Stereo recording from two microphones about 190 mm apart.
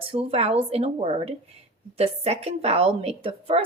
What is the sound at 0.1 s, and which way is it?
A woman's voice, 30° right (ahead or behind).